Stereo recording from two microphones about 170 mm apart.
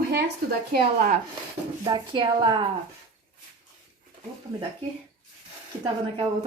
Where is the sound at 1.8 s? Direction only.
25° right (ahead or behind).